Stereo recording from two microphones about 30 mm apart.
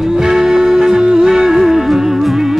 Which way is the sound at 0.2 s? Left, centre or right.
Centre.